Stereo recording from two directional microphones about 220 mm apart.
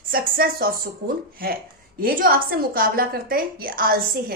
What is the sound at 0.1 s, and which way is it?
A woman's voice, 40° right (ahead or behind).